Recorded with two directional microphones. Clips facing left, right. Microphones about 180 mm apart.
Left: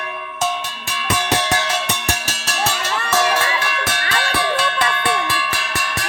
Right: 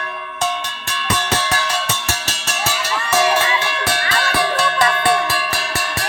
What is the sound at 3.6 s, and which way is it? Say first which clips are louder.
Music: right 2 dB; 30° right (ahead or behind).